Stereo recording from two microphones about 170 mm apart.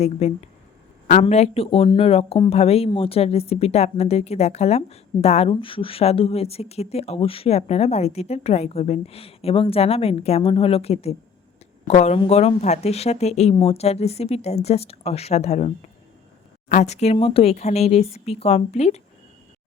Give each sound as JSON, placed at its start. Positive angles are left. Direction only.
{"t": 0.0, "sound": "speech", "side_deg": 40}